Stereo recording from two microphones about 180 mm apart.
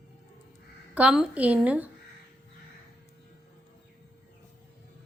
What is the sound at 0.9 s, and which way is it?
Speech, 5° right (ahead or behind).